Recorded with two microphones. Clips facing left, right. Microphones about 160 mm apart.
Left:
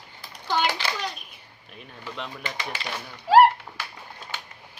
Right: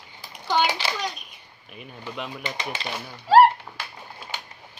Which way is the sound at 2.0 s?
10° right (ahead or behind).